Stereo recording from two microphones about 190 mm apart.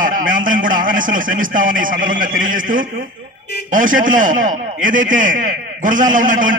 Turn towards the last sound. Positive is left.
turn(degrees=-45)  # may be behind; listen again after turning